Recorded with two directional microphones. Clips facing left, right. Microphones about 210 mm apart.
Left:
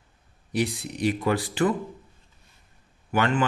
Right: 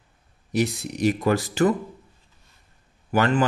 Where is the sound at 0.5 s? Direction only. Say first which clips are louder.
Right 3 dB; 45° right (ahead or behind).